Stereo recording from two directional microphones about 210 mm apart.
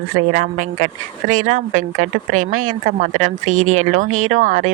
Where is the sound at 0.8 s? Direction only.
35° right (ahead or behind).